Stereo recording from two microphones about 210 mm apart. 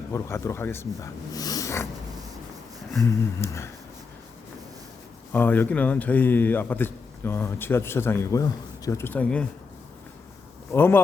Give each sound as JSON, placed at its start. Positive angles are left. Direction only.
{"t": 0.1, "sound": "a man's voice", "side_deg": 15}
{"t": 1.3, "sound": "cat", "side_deg": 15}
{"t": 3.0, "sound": "a man's voice", "side_deg": 15}
{"t": 5.3, "sound": "a man's voice", "side_deg": 10}
{"t": 10.7, "sound": "a man's voice", "side_deg": 10}